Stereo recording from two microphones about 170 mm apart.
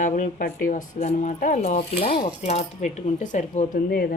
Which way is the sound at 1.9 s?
60° left (ahead or behind).